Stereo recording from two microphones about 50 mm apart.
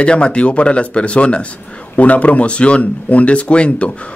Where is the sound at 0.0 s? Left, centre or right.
Left.